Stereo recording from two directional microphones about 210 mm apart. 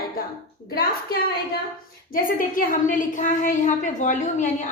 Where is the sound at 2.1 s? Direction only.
40° left (ahead or behind).